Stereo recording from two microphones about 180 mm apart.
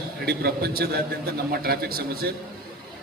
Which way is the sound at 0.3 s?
60° right (ahead or behind).